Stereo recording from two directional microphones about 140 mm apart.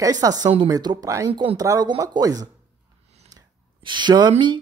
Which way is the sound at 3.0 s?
50° right (ahead or behind).